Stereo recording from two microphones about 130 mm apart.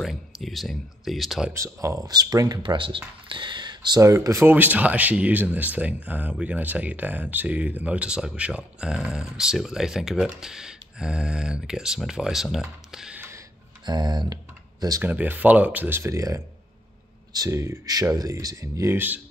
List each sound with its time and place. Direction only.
0.0 s speech: centre (ahead or behind)
1.5 s speech: 20° right (ahead or behind); by 13.2 s 5° right (ahead or behind)
13.8 s speech: 35° right (ahead or behind)
15.0 s speech: 10° right (ahead or behind)